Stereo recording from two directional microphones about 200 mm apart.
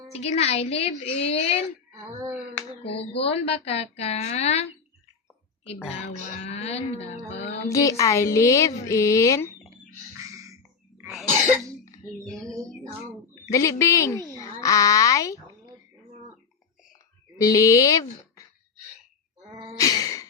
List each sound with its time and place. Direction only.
0.1 s speech: 30° left (ahead or behind)
2.6 s speech: 30° left (ahead or behind)
5.9 s speech: 30° left (ahead or behind)
7.7 s a woman's voice: 15° left (ahead or behind)
10.2 s a sound: 15° right (ahead or behind)
12.2 s speech: centre (ahead or behind)
13.5 s a woman's voice: 15° left (ahead or behind)
17.3 s speech: 15° left (ahead or behind)
19.8 s gasp: 20° left (ahead or behind)